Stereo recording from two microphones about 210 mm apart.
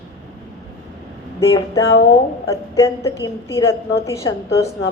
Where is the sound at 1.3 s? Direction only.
15° left (ahead or behind).